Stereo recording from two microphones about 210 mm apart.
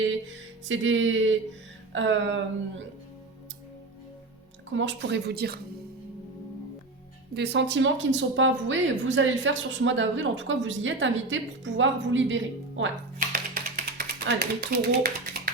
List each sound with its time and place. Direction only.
0.7 s a woman's voice: 65° right (ahead or behind)
4.7 s a woman's voice: 60° right (ahead or behind)
7.3 s a woman's voice: 55° right (ahead or behind)
13.1 s a sound: 40° right (ahead or behind)